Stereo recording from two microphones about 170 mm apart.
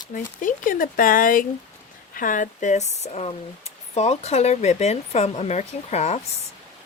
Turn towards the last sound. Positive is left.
turn(degrees=40)  # may be behind; listen again after turning